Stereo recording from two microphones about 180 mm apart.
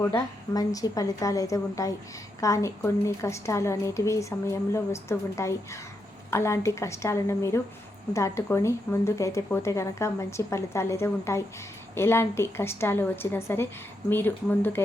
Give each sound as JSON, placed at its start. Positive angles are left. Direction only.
{"t": 0.0, "sound": "a woman's voice", "side_deg": 15}